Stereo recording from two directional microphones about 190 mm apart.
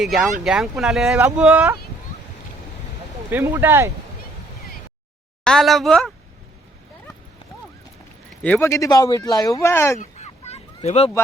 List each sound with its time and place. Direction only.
0.0 s speech: centre (ahead or behind)
3.2 s speech: 10° right (ahead or behind)
5.4 s speech: 5° left (ahead or behind)
8.4 s speech: 10° left (ahead or behind)
10.0 s fowl: 35° left (ahead or behind)